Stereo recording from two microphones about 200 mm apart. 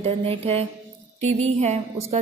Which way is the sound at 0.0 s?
30° right (ahead or behind).